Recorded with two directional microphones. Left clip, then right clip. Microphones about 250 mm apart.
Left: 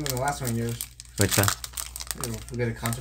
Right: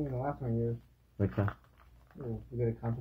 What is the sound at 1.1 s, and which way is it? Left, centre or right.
Speech, left.